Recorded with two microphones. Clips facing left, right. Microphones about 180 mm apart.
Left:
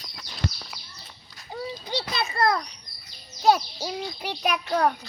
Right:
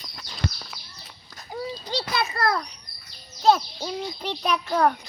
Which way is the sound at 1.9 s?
20° left (ahead or behind).